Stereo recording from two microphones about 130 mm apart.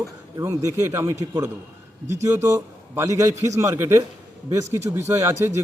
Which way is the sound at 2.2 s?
25° right (ahead or behind).